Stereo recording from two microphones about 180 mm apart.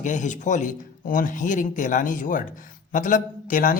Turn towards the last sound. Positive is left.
turn(degrees=50)  # may be behind; listen again after turning